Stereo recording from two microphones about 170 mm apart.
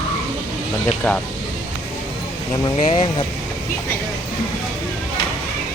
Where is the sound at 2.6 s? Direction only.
30° left (ahead or behind).